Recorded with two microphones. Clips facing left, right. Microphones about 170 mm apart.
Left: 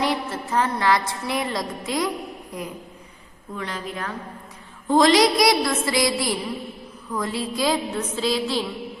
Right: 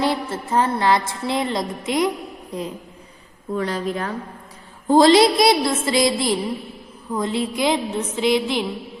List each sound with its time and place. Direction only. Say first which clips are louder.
0.0 s music: right 2 dB; 30° right (ahead or behind)
3.5 s a woman's voice: right 8 dB; 35° right (ahead or behind)
4.9 s music: right 4 dB; 30° right (ahead or behind)